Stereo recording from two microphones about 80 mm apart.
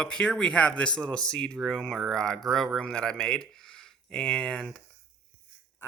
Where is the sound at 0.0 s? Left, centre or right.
Centre.